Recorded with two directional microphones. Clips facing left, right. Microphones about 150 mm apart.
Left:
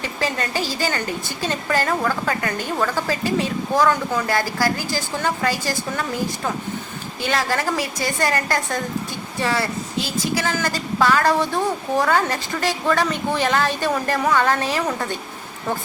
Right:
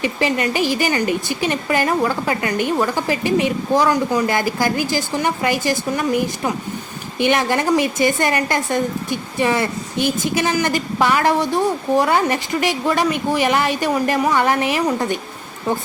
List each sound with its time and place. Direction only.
0.0 s a woman's voice: 15° right (ahead or behind)